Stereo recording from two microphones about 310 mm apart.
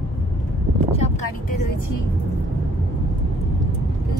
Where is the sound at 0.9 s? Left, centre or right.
Centre.